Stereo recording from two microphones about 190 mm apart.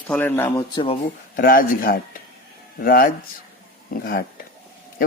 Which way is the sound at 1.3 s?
50° left (ahead or behind).